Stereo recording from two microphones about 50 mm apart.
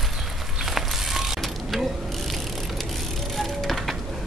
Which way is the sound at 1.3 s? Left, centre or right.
Centre.